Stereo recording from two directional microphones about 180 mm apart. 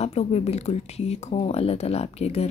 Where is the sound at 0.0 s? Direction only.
35° left (ahead or behind).